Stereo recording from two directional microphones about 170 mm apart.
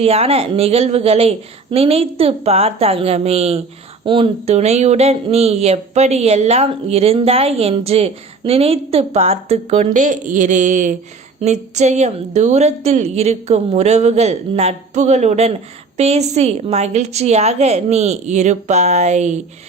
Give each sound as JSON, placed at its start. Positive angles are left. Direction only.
{"t": 0.0, "sound": "speech", "side_deg": -35}